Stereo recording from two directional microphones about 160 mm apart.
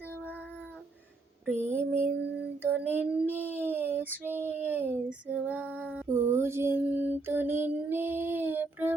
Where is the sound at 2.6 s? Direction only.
10° right (ahead or behind).